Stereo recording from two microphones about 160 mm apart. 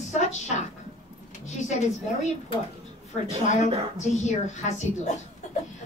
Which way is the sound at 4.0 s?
50° left (ahead or behind).